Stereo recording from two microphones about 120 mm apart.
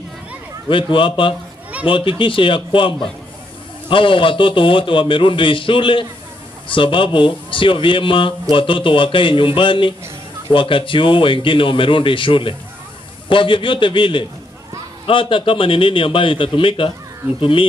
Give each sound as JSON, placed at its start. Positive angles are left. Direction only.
{"t": 0.7, "sound": "a man's voice", "side_deg": 45}